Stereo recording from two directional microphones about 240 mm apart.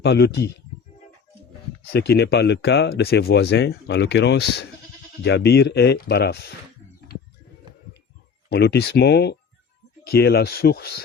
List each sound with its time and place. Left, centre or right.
0.0 s speech: left
1.9 s speech: left
8.4 s speech: left